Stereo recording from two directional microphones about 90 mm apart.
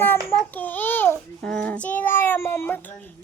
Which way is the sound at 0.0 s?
20° left (ahead or behind).